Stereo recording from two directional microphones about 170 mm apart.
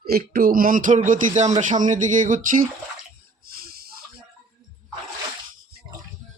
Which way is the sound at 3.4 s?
60° right (ahead or behind).